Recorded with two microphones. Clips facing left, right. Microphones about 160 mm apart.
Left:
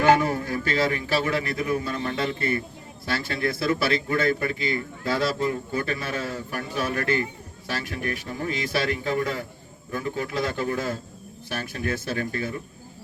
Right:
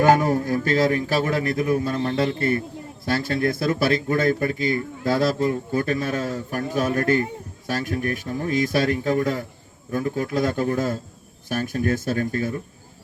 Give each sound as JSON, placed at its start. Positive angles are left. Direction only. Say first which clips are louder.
{"t": 0.0, "sound": "a man's voice", "louder": "right 3 dB", "side_deg": -45}